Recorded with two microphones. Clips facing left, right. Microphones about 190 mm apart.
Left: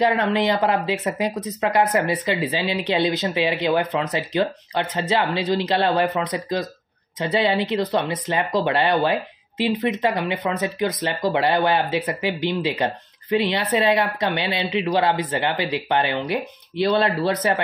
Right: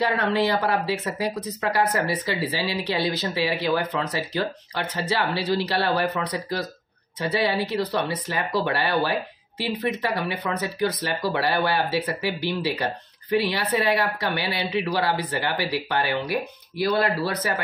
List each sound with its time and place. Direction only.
0.0 s speech: 20° left (ahead or behind)